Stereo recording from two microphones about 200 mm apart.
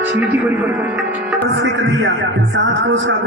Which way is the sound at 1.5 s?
65° right (ahead or behind).